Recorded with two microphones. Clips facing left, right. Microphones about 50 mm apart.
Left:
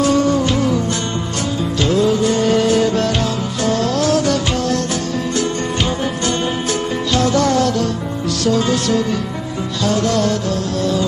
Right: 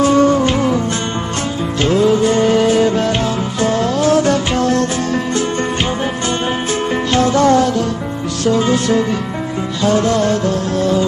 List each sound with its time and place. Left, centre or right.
0.0 s music: right
1.8 s music: right
2.4 s music: centre; by 4.8 s right
7.2 s music: right